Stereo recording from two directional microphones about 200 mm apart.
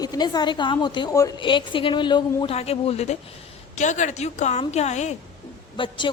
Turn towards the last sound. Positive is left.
turn(degrees=25)  # may be behind; listen again after turning